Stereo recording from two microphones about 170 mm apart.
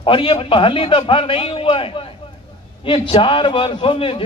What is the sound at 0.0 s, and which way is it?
A man's voice, 30° left (ahead or behind).